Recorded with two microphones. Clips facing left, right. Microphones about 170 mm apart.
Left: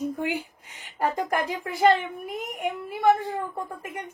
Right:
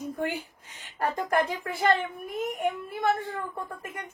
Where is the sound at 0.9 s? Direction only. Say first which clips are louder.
Even; 10° left (ahead or behind).